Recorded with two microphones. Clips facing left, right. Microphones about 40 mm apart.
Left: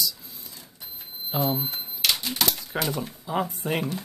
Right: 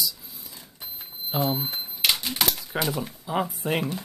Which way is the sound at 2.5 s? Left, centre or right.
Centre.